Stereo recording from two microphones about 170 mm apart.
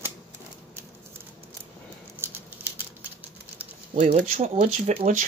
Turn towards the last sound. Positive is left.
turn(degrees=-45)  # may be behind; listen again after turning